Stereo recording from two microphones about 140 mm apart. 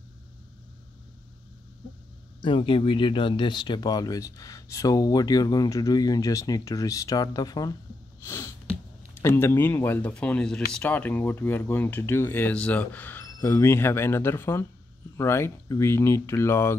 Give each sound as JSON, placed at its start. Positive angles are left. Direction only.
{"t": 2.4, "sound": "speech", "side_deg": 35}
{"t": 8.2, "sound": "sneeze", "side_deg": 20}
{"t": 8.6, "sound": "speech", "side_deg": 15}